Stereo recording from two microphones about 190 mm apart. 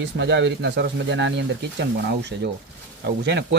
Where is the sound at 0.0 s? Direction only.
70° right (ahead or behind).